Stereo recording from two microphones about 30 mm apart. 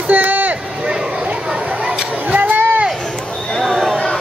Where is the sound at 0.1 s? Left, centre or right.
Right.